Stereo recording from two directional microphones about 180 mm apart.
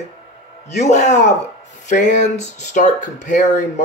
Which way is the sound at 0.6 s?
40° left (ahead or behind).